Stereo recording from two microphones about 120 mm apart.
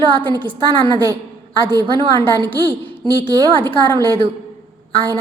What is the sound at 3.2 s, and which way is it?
Speech, 40° right (ahead or behind).